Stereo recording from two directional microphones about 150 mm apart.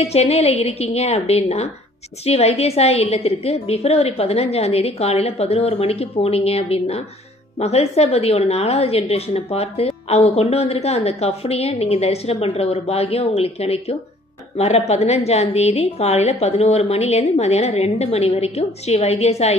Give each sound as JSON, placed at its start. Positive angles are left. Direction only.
{"t": 0.0, "sound": "a woman's voice", "side_deg": 45}